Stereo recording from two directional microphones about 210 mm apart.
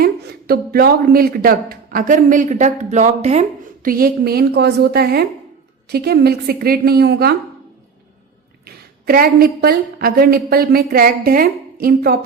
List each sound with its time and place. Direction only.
0.0 s speech: 45° right (ahead or behind)
3.8 s a woman's voice: 45° right (ahead or behind)
8.6 s a woman's voice: 45° right (ahead or behind)